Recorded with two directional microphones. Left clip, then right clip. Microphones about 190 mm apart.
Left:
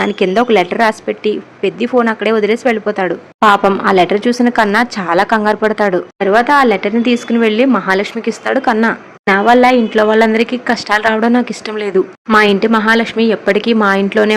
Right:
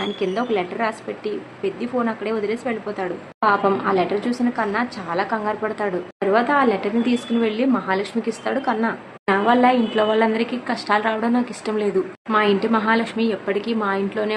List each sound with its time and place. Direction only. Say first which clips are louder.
0.0 s a woman's voice: left 11 dB; 45° left (ahead or behind)